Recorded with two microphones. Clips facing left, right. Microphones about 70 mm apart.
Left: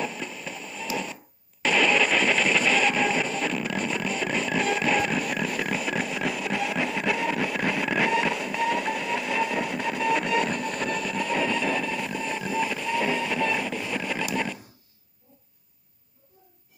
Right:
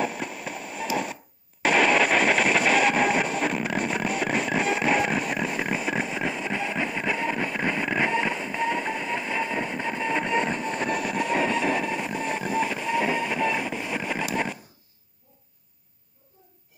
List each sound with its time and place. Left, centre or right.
0.0 s train: right
5.8 s music: right